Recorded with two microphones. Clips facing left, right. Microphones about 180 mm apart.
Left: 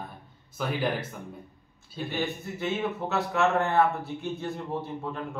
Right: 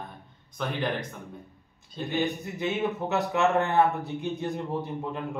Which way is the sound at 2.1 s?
20° right (ahead or behind).